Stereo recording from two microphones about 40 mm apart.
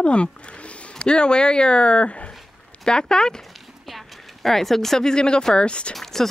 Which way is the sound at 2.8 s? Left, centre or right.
Centre.